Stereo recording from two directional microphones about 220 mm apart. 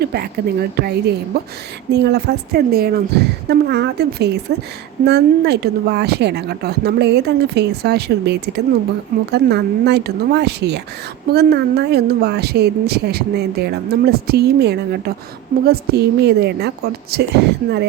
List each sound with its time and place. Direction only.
0.0 s a woman's voice: 45° right (ahead or behind)